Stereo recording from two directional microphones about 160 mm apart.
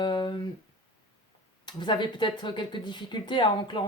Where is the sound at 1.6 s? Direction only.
30° left (ahead or behind).